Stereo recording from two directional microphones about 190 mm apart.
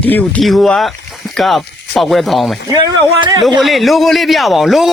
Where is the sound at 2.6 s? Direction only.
20° right (ahead or behind).